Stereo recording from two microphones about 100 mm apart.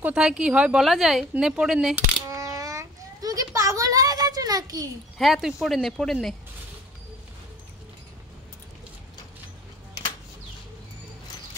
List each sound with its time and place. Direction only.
0.0 s a woman's voice: 10° right (ahead or behind)
2.2 s a sound: 30° right (ahead or behind)
5.1 s speech: centre (ahead or behind)